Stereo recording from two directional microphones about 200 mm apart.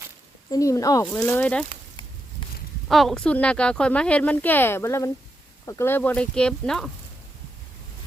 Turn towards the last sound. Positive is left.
turn(degrees=0)  # may be behind; listen again after turning